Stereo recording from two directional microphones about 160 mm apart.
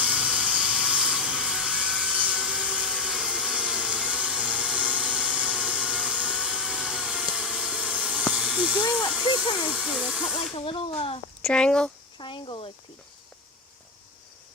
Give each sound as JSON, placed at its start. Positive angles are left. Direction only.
{"t": 0.0, "sound": "a sound", "side_deg": -5}
{"t": 8.3, "sound": "hiss", "side_deg": -5}
{"t": 9.6, "sound": "speech", "side_deg": -5}
{"t": 10.3, "sound": "speech", "side_deg": 35}
{"t": 11.4, "sound": "speech", "side_deg": 5}
{"t": 12.1, "sound": "a sound", "side_deg": 30}